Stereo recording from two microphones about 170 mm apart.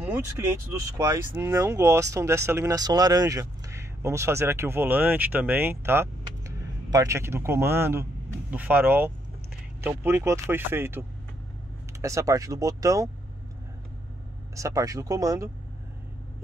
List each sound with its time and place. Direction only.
0.7 s speech: 20° right (ahead or behind)
14.5 s speech: 20° right (ahead or behind)